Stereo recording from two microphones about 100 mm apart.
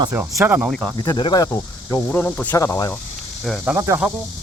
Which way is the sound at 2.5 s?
30° left (ahead or behind).